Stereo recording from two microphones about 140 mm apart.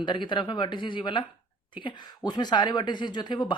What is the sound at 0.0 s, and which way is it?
A woman's voice, 35° left (ahead or behind).